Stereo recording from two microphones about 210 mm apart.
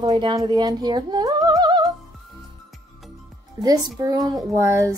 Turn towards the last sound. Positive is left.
turn(degrees=-15)  # may be behind; listen again after turning